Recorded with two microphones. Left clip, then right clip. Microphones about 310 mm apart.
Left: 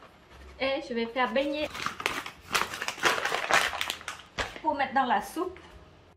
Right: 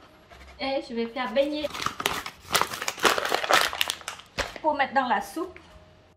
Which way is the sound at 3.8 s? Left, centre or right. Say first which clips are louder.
Right 5 dB; right.